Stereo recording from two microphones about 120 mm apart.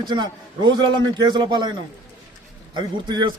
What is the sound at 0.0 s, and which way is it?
A man's voice, 40° right (ahead or behind).